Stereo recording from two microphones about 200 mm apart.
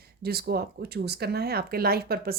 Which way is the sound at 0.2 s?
50° right (ahead or behind).